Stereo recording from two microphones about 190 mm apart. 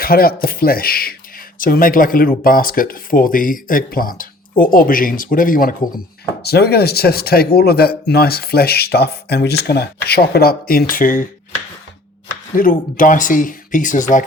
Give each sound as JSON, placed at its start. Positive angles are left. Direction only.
{"t": 0.0, "sound": "speech", "side_deg": 50}
{"t": 6.4, "sound": "speech", "side_deg": 60}
{"t": 12.5, "sound": "speech", "side_deg": 45}